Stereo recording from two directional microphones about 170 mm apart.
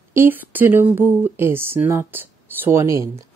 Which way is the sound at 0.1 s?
15° right (ahead or behind).